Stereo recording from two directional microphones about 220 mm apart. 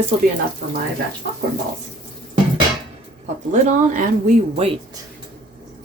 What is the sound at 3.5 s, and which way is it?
Speech, 35° right (ahead or behind).